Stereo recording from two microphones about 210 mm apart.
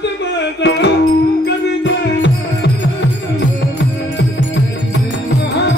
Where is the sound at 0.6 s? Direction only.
55° left (ahead or behind).